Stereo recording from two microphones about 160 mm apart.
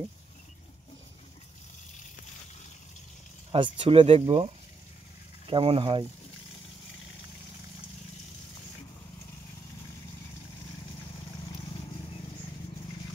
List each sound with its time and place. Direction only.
3.5 s speech: 30° right (ahead or behind)
5.5 s speech: 35° right (ahead or behind)